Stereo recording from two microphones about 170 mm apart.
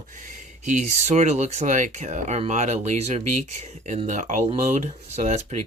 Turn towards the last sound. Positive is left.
turn(degrees=-40)  # may be behind; listen again after turning